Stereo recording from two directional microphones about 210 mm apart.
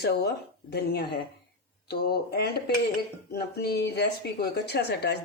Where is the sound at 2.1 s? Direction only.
50° left (ahead or behind).